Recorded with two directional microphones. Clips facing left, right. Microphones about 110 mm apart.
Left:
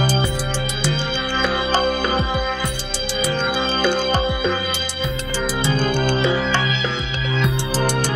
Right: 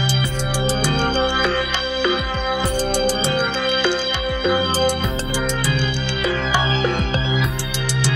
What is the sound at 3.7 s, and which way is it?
Music, 50° left (ahead or behind).